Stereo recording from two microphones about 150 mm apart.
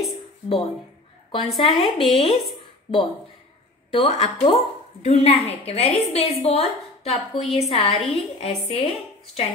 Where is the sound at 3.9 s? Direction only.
40° left (ahead or behind).